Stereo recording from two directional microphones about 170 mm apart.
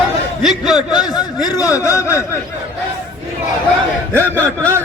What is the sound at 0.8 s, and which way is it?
Speech, 25° left (ahead or behind).